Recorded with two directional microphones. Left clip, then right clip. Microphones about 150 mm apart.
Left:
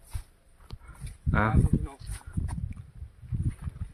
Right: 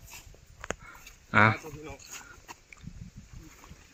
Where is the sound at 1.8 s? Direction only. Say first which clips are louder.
Right 3 dB; 15° left (ahead or behind).